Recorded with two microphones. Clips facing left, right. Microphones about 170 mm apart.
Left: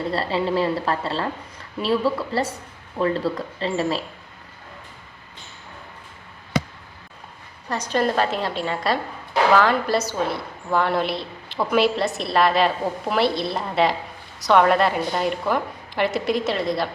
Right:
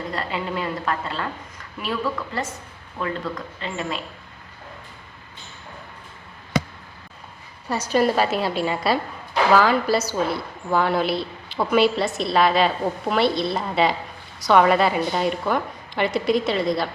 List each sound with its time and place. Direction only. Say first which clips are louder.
0.1 s a woman's voice: left 6 dB; 30° left (ahead or behind)
7.7 s a woman's voice: right 2 dB; 5° right (ahead or behind)